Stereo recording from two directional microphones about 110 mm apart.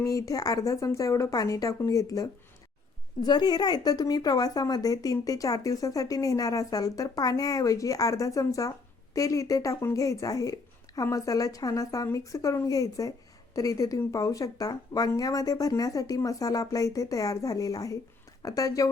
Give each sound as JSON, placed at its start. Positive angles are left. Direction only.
{"t": 0.0, "sound": "speech", "side_deg": 30}